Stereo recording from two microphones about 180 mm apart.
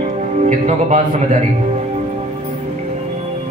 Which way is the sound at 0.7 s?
40° right (ahead or behind).